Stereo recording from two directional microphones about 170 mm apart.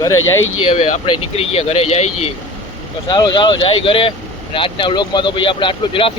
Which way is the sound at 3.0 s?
25° left (ahead or behind).